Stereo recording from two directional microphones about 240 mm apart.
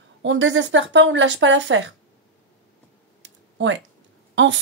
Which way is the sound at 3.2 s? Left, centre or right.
Right.